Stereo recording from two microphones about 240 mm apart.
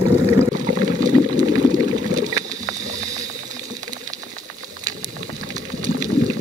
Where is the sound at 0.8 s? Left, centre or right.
Centre.